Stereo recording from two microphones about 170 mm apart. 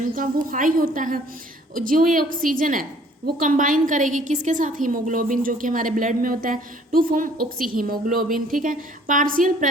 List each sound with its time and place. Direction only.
0.0 s a woman's voice: 50° right (ahead or behind)